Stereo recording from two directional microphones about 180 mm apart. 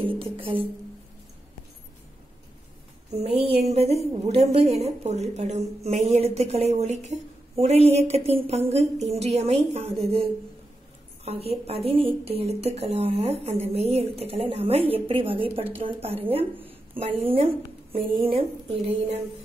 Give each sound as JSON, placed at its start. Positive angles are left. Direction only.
{"t": 0.0, "sound": "music", "side_deg": -30}
{"t": 3.2, "sound": "a woman's voice", "side_deg": -35}
{"t": 17.3, "sound": "a woman's voice", "side_deg": -30}